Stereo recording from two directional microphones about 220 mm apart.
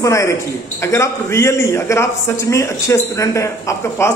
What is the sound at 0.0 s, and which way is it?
A man's voice, 15° left (ahead or behind).